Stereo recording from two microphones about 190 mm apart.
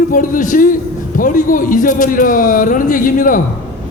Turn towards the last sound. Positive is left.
turn(degrees=45)  # may be behind; listen again after turning